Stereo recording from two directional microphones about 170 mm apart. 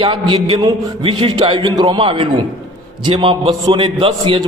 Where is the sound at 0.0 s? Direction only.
30° right (ahead or behind).